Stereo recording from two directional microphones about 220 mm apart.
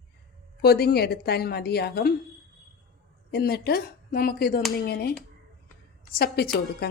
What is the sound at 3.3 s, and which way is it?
A woman's voice, 45° left (ahead or behind).